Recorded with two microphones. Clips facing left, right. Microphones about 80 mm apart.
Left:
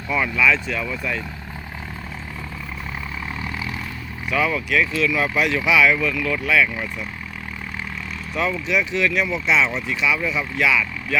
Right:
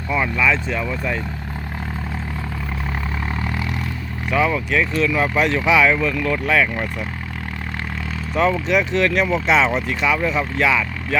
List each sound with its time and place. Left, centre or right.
0.1 s speech: right
4.3 s speech: right
8.4 s speech: right